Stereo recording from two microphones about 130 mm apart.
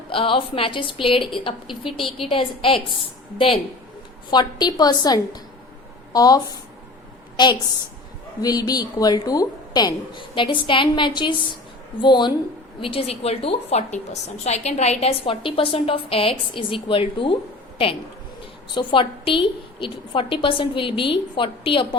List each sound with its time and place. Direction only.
0.1 s a woman's voice: 45° left (ahead or behind)
8.4 s a woman's voice: 30° left (ahead or behind)
18.7 s a woman's voice: 40° left (ahead or behind)